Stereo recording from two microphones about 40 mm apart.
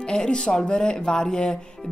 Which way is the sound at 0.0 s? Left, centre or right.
Left.